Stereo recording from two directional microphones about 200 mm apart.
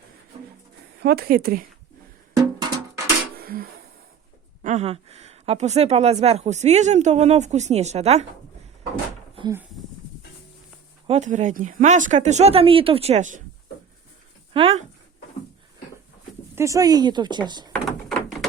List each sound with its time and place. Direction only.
0.3 s music: 30° right (ahead or behind)
0.9 s speech: 50° right (ahead or behind)
2.4 s music: 20° right (ahead or behind)
3.3 s a sound: 50° right (ahead or behind)
4.6 s speech: 35° right (ahead or behind)
11.0 s speech: 35° right (ahead or behind)
14.5 s speech: 25° right (ahead or behind)
16.6 s a woman's voice: 15° right (ahead or behind)
17.7 s door: centre (ahead or behind)